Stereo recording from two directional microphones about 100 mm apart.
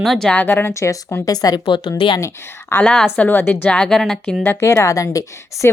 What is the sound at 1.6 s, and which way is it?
Speech, 55° left (ahead or behind).